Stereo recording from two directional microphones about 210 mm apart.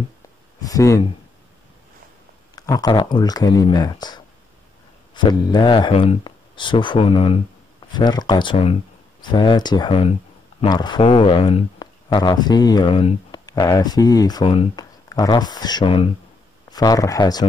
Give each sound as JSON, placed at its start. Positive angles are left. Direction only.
{"t": 0.6, "sound": "speech", "side_deg": 15}
{"t": 2.5, "sound": "speech", "side_deg": 20}